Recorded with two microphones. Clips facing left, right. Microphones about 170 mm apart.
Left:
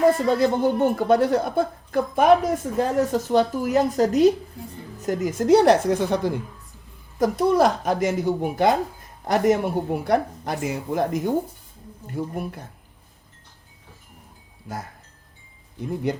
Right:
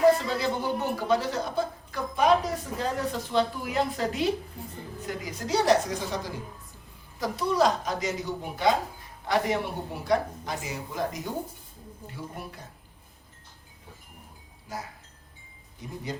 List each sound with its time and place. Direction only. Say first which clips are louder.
0.1 s speech: left 5 dB; 50° left (ahead or behind)